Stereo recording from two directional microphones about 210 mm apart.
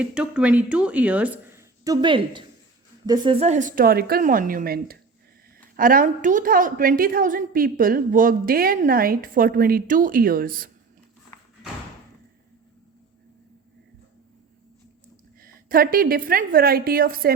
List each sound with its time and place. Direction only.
0.0 s a woman's voice: 5° right (ahead or behind); by 10.7 s 45° right (ahead or behind)
15.4 s a woman's voice: 45° right (ahead or behind)